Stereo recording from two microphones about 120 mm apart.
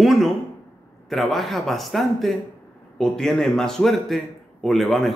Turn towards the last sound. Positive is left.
turn(degrees=0)  # may be behind; listen again after turning